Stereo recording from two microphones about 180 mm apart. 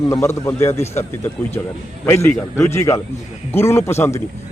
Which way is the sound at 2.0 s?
15° left (ahead or behind).